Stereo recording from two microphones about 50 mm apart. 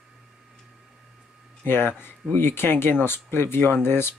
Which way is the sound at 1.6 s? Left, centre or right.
Left.